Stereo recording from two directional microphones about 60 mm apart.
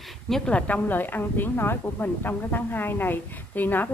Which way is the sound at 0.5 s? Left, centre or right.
Left.